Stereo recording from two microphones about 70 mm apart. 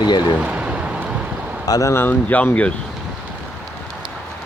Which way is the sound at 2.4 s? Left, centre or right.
Centre.